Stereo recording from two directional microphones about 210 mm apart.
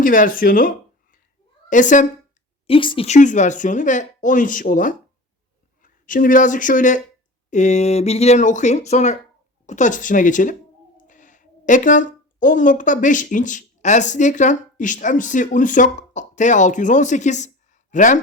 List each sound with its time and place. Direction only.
0.0 s speech: 40° left (ahead or behind)
1.7 s speech: 35° left (ahead or behind)
2.6 s speech: 25° left (ahead or behind)